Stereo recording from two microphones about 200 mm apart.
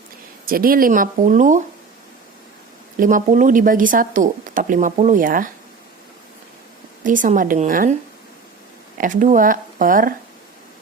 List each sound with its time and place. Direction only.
0.4 s speech: 45° right (ahead or behind)
3.0 s speech: 40° right (ahead or behind)
7.0 s speech: 40° right (ahead or behind)
9.0 s speech: 40° right (ahead or behind)